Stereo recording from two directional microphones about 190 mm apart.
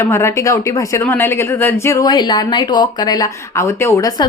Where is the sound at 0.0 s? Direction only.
15° left (ahead or behind).